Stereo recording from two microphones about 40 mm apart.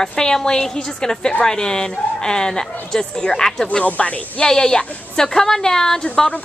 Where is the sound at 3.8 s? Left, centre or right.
Left.